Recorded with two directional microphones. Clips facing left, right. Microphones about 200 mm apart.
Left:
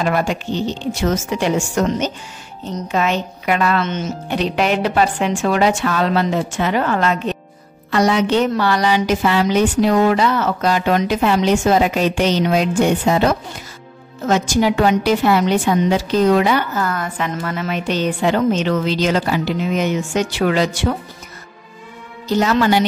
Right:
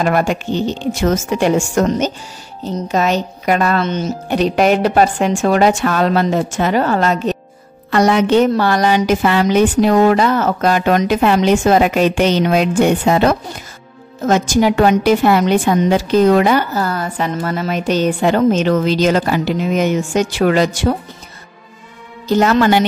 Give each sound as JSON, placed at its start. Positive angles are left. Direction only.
{"t": 0.0, "sound": "a woman's voice", "side_deg": -50}
{"t": 7.9, "sound": "a woman's voice", "side_deg": -50}
{"t": 14.2, "sound": "a woman's voice", "side_deg": -50}
{"t": 22.3, "sound": "a woman's voice", "side_deg": -55}